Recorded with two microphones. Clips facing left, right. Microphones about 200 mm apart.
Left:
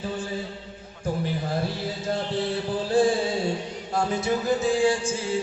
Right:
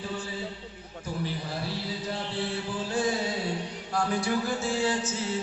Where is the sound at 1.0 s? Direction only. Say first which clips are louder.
Left 6 dB; 50° left (ahead or behind).